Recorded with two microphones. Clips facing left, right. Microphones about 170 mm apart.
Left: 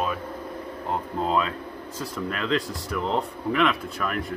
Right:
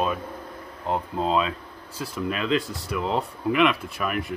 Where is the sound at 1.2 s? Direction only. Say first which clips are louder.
Right 1 dB; 20° right (ahead or behind).